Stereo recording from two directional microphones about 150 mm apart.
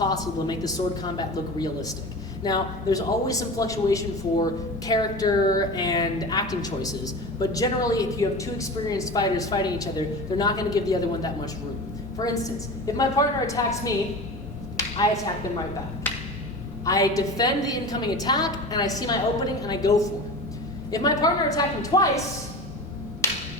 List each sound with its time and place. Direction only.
0.0 s a woman's voice: 25° left (ahead or behind)
14.8 s a sound: 20° left (ahead or behind)
16.1 s wood block: 10° left (ahead or behind)
16.8 s a woman's voice: 20° left (ahead or behind)